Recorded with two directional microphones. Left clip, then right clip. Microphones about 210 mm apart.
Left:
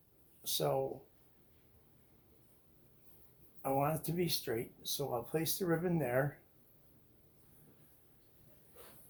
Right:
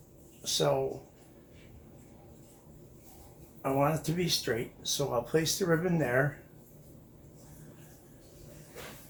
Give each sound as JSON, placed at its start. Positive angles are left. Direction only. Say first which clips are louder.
{"t": 0.4, "sound": "speech", "louder": "right 7 dB", "side_deg": 40}
{"t": 3.6, "sound": "speech", "louder": "right 6 dB", "side_deg": 40}